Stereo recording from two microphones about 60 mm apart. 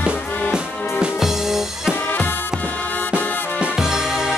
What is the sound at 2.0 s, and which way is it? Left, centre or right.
Music, left.